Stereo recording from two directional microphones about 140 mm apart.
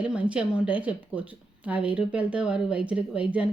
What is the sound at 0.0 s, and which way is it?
Speech, 10° right (ahead or behind).